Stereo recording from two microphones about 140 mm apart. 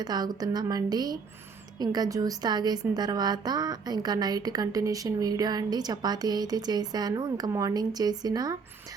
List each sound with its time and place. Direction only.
0.0 s a woman's voice: 30° right (ahead or behind)